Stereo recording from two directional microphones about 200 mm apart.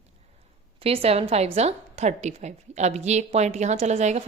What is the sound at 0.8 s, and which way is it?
A woman's voice, 30° right (ahead or behind).